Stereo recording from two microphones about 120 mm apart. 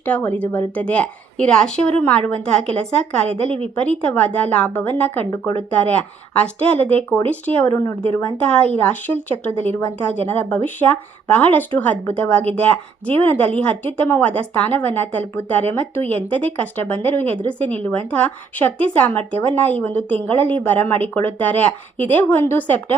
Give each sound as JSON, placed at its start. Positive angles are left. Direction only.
{"t": 0.0, "sound": "speech", "side_deg": 15}
{"t": 3.4, "sound": "a woman's voice", "side_deg": -55}
{"t": 3.8, "sound": "speech", "side_deg": 10}
{"t": 7.7, "sound": "speech", "side_deg": 25}
{"t": 8.4, "sound": "speech", "side_deg": 10}